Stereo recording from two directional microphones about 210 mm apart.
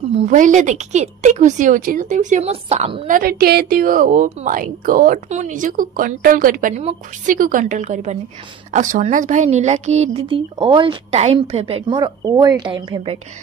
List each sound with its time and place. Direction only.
0.2 s a woman's voice: 35° right (ahead or behind)
3.1 s a woman's voice: 45° right (ahead or behind); by 13.2 s 25° right (ahead or behind)